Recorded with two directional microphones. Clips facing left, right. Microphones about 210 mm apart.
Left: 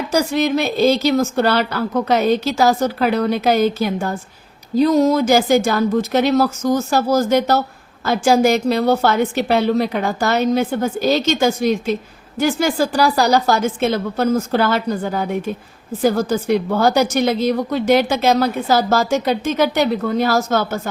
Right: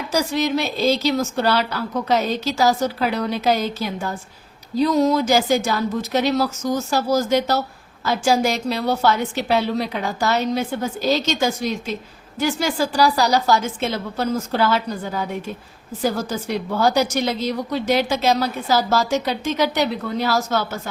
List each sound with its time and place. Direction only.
0.1 s a woman's voice: 55° left (ahead or behind)